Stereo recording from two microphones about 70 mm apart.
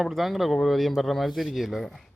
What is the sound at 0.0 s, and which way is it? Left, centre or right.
Speech, centre.